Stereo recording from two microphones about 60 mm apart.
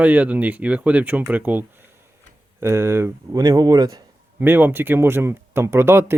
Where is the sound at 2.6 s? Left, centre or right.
Right.